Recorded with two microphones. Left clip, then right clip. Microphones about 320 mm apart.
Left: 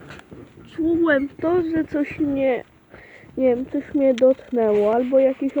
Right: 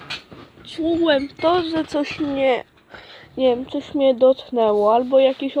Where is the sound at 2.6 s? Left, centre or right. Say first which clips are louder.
Right 3 dB; right.